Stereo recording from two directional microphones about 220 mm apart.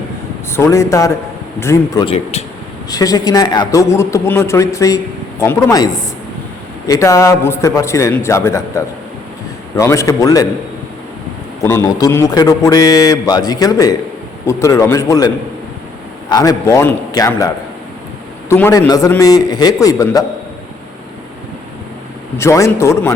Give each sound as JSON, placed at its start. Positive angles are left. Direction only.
{"t": 0.5, "sound": "a man's voice", "side_deg": 15}
{"t": 11.6, "sound": "a man's voice", "side_deg": 10}
{"t": 16.3, "sound": "a man's voice", "side_deg": 15}
{"t": 22.4, "sound": "a man's voice", "side_deg": 15}